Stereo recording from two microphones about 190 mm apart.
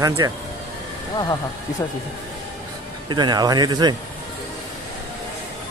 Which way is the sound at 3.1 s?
20° right (ahead or behind).